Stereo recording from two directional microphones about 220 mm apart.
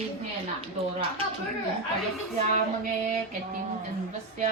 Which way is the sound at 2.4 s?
35° right (ahead or behind).